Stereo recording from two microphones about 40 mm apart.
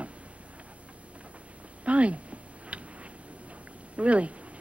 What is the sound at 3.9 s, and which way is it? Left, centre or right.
Speech, right.